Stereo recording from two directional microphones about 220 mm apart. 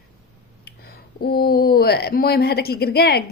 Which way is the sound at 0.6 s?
45° left (ahead or behind).